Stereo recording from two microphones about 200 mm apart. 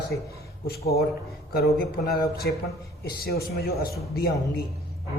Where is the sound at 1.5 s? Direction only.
50° left (ahead or behind).